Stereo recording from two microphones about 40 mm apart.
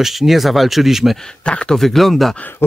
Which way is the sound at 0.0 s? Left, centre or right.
Centre.